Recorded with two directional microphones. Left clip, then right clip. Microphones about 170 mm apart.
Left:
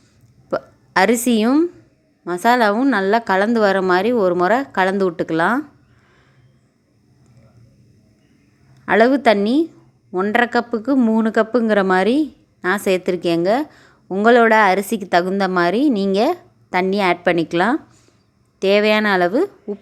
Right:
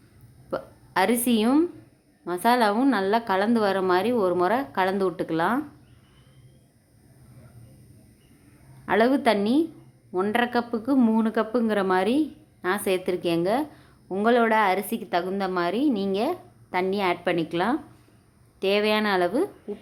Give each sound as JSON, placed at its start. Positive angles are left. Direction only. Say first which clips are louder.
{"t": 0.5, "sound": "a woman's voice", "louder": "left 8 dB", "side_deg": 35}
{"t": 8.9, "sound": "a woman's voice", "louder": "left 7 dB", "side_deg": 30}